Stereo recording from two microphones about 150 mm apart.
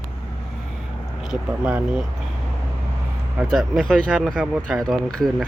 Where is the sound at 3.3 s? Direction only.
Centre (ahead or behind).